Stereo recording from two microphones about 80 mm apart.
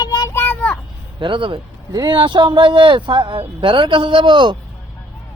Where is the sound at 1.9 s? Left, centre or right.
Right.